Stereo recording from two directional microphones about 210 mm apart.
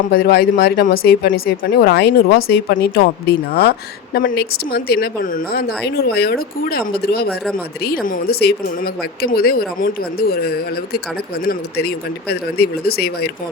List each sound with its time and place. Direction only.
0.1 s speech: 45° left (ahead or behind)